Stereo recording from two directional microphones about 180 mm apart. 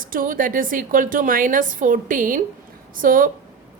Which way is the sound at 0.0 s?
50° right (ahead or behind).